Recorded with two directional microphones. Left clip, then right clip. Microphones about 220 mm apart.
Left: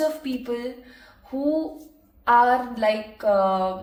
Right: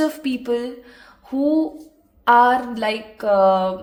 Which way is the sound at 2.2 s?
50° right (ahead or behind).